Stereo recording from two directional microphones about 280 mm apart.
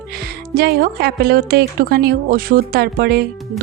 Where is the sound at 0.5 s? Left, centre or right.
Right.